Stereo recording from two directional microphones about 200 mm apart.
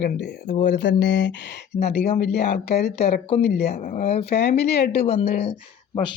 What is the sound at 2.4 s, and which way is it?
Speech, 35° left (ahead or behind).